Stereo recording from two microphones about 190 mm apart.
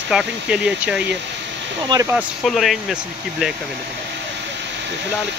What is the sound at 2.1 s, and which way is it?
Speech, centre (ahead or behind).